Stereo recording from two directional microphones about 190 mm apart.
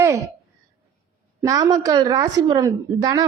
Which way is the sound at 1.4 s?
20° right (ahead or behind).